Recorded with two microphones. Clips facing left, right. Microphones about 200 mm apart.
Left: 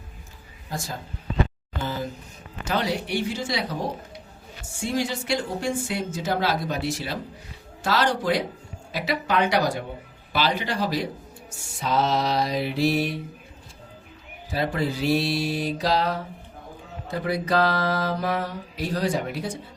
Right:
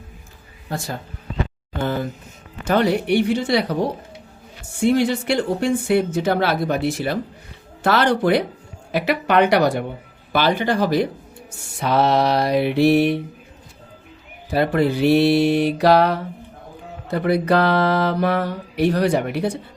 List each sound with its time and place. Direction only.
0.7 s mantra: 60° right (ahead or behind)
4.8 s mantra: 60° right (ahead or behind)
10.3 s speech: 55° right (ahead or behind)
11.8 s mantra: 65° right (ahead or behind)
14.5 s mantra: 60° right (ahead or behind)